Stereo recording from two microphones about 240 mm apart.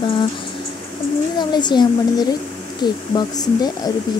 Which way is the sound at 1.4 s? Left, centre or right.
Centre.